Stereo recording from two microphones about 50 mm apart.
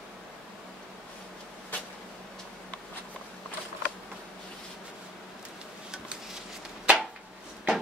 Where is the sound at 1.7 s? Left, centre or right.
Left.